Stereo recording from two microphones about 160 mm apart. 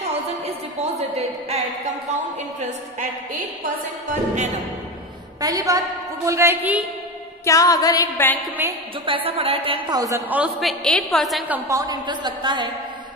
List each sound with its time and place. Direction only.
0.1 s music: 40° right (ahead or behind)
3.6 s speech: 55° right (ahead or behind)
5.4 s a woman's voice: 20° right (ahead or behind)
7.4 s a sound: 20° left (ahead or behind)
8.6 s a woman's voice: 15° right (ahead or behind)
9.0 s a woman's voice: 35° right (ahead or behind); by 11.5 s centre (ahead or behind)
11.5 s a woman's voice: 20° right (ahead or behind)